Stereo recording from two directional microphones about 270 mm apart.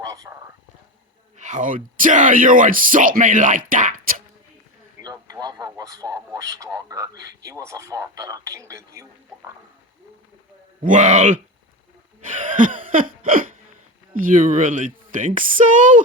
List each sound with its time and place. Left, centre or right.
0.0 s whispering: centre
1.4 s speech: right
4.9 s a man's voice: centre
10.8 s speech: right
12.3 s hiccup: right
14.2 s speech: right